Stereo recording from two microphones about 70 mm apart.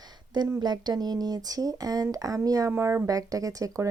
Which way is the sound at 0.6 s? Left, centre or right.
Right.